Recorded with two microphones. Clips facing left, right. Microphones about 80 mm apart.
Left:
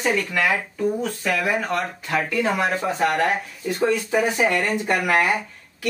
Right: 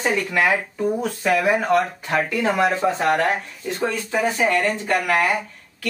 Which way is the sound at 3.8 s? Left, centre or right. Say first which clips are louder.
Left 2 dB; centre.